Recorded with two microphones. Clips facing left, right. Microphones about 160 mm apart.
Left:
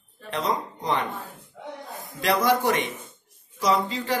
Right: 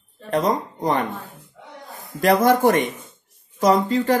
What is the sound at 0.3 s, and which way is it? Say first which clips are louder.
Speech: right 6 dB; 45° right (ahead or behind).